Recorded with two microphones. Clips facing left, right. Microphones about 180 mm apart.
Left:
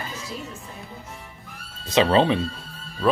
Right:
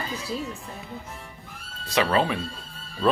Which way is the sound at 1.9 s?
25° left (ahead or behind).